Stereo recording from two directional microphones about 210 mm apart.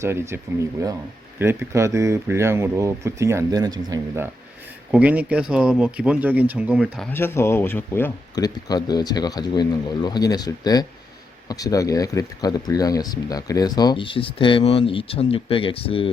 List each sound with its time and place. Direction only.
0.0 s speech: 10° right (ahead or behind); by 16.0 s 25° left (ahead or behind)